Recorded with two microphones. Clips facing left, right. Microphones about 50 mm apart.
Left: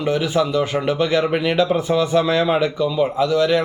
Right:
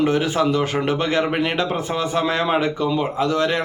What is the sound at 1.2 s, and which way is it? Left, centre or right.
A man's voice, right.